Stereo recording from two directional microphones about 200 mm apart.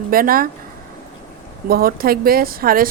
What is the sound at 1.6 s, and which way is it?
Speech, 50° right (ahead or behind).